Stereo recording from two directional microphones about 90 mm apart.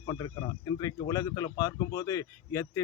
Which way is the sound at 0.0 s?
50° left (ahead or behind).